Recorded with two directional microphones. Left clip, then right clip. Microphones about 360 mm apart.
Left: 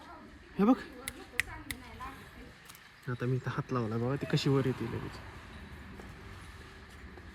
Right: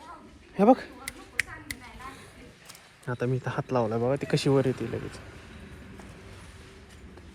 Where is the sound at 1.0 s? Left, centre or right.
Left.